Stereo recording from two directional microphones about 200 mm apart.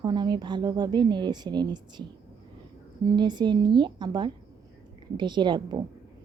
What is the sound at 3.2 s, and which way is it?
A woman's voice, 20° right (ahead or behind).